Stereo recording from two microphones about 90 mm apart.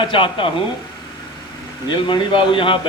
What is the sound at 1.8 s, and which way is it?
A man's voice, 60° left (ahead or behind).